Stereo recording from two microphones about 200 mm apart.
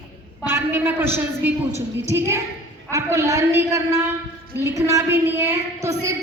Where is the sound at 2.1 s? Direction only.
15° right (ahead or behind).